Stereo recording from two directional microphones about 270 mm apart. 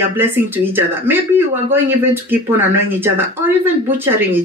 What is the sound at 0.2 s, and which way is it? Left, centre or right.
Speech, centre.